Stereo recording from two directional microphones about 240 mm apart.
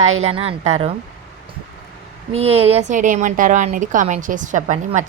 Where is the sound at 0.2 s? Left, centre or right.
Right.